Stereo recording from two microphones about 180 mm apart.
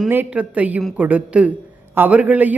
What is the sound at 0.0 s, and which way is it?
A man's voice, 10° right (ahead or behind).